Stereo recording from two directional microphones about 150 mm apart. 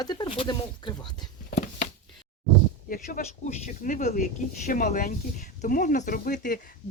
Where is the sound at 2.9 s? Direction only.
60° left (ahead or behind).